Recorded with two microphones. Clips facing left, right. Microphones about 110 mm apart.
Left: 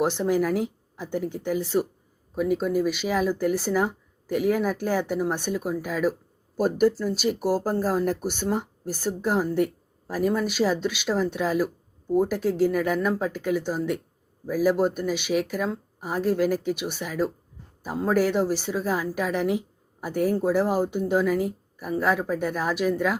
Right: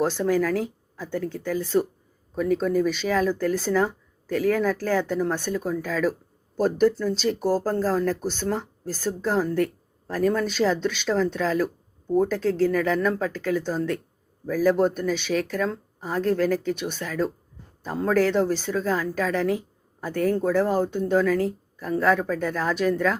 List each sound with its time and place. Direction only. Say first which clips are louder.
0.0 s speech: right 1 dB; 15° left (ahead or behind)